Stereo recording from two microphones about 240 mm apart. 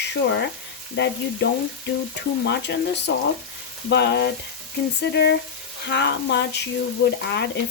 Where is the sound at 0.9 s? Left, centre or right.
Left.